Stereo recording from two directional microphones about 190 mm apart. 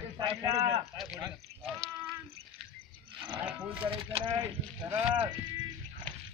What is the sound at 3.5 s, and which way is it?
A man's voice, 10° right (ahead or behind).